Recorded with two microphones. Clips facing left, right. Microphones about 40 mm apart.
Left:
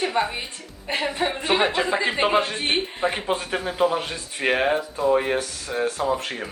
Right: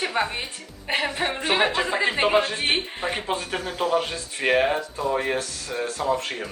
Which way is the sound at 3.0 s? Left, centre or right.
Centre.